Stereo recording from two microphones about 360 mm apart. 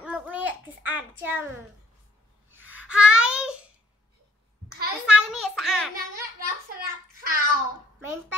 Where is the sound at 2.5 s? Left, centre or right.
Centre.